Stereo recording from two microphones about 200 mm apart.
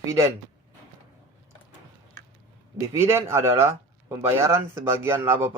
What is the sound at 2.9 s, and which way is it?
Speech, 15° right (ahead or behind).